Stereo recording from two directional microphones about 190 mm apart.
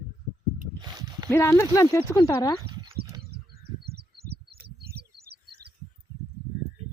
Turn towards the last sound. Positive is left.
turn(degrees=-55)  # may be behind; listen again after turning